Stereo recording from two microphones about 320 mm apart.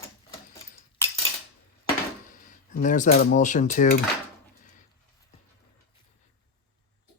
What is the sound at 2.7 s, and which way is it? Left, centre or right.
Cutlery, left.